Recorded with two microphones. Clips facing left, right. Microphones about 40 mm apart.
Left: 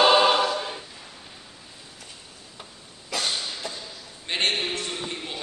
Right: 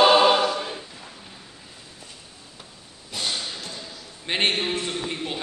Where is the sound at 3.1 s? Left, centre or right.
Left.